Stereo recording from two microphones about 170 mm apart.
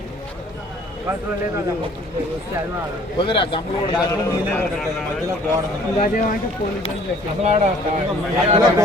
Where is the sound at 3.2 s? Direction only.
30° left (ahead or behind).